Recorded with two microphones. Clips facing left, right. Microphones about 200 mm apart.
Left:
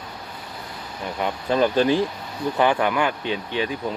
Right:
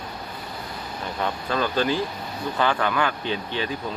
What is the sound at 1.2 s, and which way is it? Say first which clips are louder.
Speech: left 5 dB; 20° left (ahead or behind).